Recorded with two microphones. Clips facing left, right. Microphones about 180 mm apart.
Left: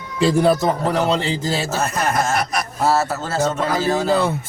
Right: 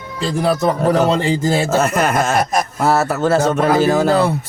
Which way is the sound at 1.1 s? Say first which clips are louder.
Right 5 dB; 50° right (ahead or behind).